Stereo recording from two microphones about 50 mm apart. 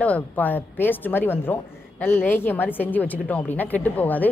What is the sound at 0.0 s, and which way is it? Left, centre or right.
A woman's voice, left.